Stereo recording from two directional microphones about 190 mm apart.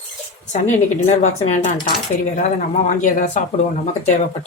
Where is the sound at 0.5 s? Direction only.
40° left (ahead or behind).